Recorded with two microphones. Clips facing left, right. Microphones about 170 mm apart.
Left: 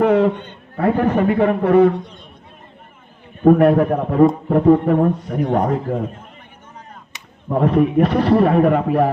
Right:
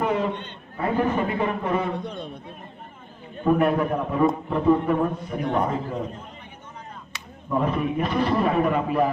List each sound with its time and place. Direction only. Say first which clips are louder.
0.0 s a sound: left 10 dB; 70° left (ahead or behind)
0.8 s a man's voice: left 6 dB; 65° left (ahead or behind)
3.7 s a man's voice: left 7 dB; 50° left (ahead or behind)
7.5 s a man's voice: left 8 dB; 70° left (ahead or behind)